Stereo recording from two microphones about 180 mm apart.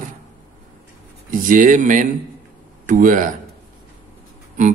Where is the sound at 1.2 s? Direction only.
45° right (ahead or behind).